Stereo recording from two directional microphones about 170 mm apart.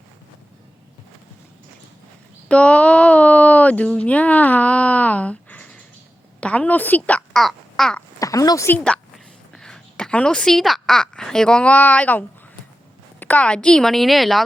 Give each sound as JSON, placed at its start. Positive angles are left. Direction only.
{"t": 2.5, "sound": "speech", "side_deg": 5}
{"t": 8.2, "sound": "speech", "side_deg": 20}
{"t": 8.8, "sound": "a woman's voice", "side_deg": 5}